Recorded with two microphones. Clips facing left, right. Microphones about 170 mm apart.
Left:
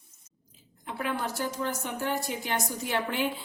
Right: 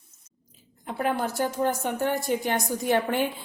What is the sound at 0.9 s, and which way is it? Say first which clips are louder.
Speech: right 5 dB; 50° right (ahead or behind).